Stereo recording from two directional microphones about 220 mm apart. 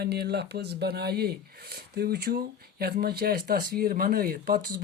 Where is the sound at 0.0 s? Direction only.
50° right (ahead or behind).